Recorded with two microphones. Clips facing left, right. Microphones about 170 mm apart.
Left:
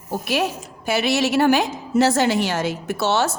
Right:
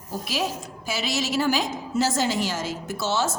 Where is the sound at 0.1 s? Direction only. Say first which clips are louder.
Left 5 dB; 60° left (ahead or behind).